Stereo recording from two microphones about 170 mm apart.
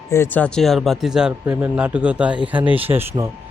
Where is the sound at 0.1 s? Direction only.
15° left (ahead or behind); by 2.9 s 10° right (ahead or behind).